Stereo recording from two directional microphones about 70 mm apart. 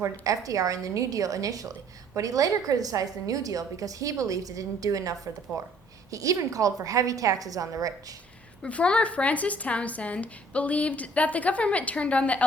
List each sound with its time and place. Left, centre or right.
0.0 s a woman's voice: right
8.6 s speech: centre